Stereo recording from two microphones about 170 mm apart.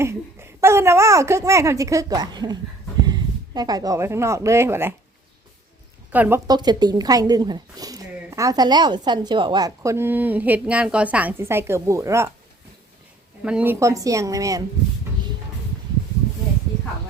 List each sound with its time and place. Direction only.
0.0 s a woman's voice: 15° right (ahead or behind)
6.1 s speech: 10° right (ahead or behind)
6.5 s a woman's voice: 25° right (ahead or behind)
13.4 s a woman's voice: 5° right (ahead or behind)